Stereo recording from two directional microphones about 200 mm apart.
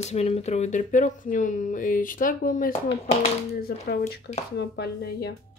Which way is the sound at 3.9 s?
50° left (ahead or behind).